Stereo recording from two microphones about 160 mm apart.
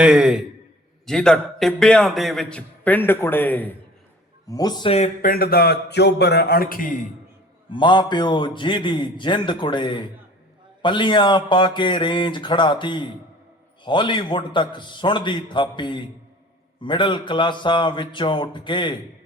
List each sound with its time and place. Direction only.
0.0 s a man's voice: 5° right (ahead or behind); by 3.8 s 10° left (ahead or behind)
4.4 s a man's voice: 25° left (ahead or behind)
4.9 s speech: 45° left (ahead or behind)
5.2 s a man's voice: 65° left (ahead or behind)
7.7 s a man's voice: 30° left (ahead or behind)